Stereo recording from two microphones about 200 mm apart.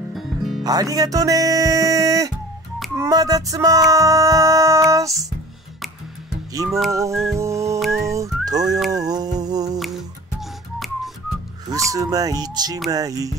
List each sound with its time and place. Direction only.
0.1 s music: centre (ahead or behind)
0.7 s speech: 20° right (ahead or behind)
6.5 s music: 15° right (ahead or behind)
6.9 s speech: 15° right (ahead or behind)
7.8 s whistling: centre (ahead or behind)
8.1 s speech: 15° right (ahead or behind)
8.9 s a sound: 20° right (ahead or behind)
11.7 s speech: 15° right (ahead or behind)